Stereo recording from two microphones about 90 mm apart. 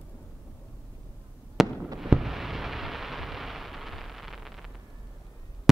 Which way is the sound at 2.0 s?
Centre (ahead or behind).